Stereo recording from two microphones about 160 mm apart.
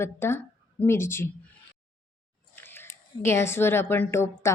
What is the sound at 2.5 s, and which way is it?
A woman's voice, 15° left (ahead or behind).